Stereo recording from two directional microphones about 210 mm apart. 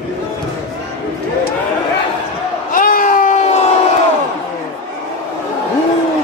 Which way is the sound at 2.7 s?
40° left (ahead or behind).